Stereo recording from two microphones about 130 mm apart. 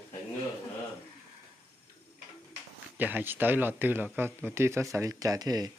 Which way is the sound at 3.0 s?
15° right (ahead or behind).